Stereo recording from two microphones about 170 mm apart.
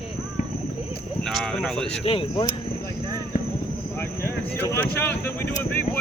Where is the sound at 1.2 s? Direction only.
Centre (ahead or behind).